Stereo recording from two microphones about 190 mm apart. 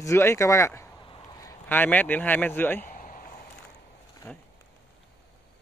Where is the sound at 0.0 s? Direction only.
15° left (ahead or behind).